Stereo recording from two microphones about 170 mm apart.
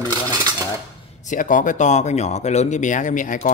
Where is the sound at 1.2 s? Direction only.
50° left (ahead or behind).